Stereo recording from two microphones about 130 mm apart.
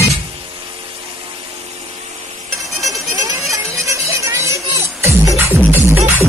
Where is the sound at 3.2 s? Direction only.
25° right (ahead or behind).